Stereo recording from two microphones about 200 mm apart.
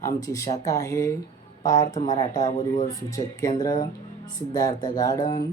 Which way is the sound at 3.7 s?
40° left (ahead or behind).